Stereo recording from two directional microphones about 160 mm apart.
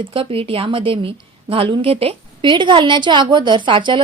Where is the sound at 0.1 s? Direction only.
35° right (ahead or behind).